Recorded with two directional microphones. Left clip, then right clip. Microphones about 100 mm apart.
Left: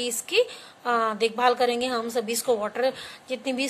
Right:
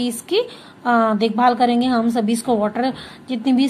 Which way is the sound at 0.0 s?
40° left (ahead or behind).